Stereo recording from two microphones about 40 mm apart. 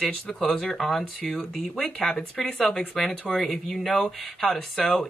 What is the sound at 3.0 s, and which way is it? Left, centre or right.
Speech, left.